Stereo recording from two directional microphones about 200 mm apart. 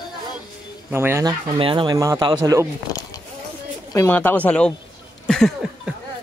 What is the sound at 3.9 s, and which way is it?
Speech, 10° left (ahead or behind).